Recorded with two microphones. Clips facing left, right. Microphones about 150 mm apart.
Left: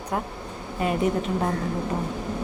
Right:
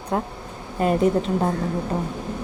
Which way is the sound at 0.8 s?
40° right (ahead or behind).